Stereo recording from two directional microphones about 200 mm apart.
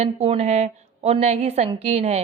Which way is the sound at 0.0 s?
35° right (ahead or behind).